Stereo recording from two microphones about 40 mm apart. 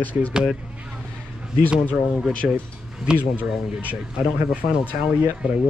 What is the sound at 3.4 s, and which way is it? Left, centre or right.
Speech, right.